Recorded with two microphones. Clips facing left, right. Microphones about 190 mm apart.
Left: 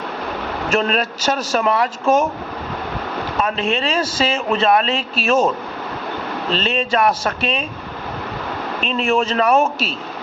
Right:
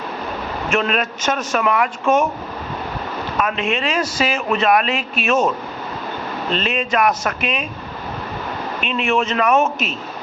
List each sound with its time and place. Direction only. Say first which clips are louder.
0.7 s speech: left 1 dB; 35° left (ahead or behind)
3.4 s speech: left 1 dB; 30° left (ahead or behind)
6.5 s speech: left 1 dB; 30° left (ahead or behind)
8.8 s speech: left 1 dB; 35° left (ahead or behind)